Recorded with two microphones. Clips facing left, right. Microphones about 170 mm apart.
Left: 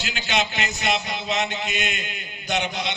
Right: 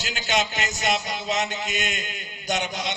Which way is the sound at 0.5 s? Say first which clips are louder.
Even; 40° right (ahead or behind).